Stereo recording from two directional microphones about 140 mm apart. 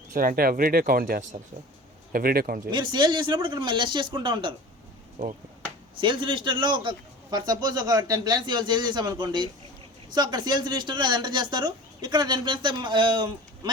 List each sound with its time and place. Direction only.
0.1 s speech: 85° right
2.6 s a man's voice: 35° right (ahead or behind)
6.0 s a man's voice: 35° right (ahead or behind)